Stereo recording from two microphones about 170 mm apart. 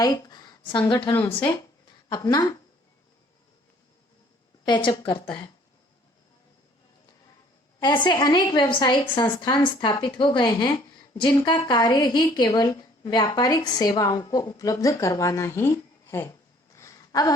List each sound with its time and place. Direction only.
0.0 s a woman's voice: 20° left (ahead or behind)
4.6 s a woman's voice: 25° left (ahead or behind)
7.8 s a woman's voice: 25° left (ahead or behind)